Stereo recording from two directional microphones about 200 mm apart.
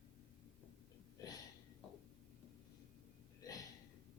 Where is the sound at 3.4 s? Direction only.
15° left (ahead or behind).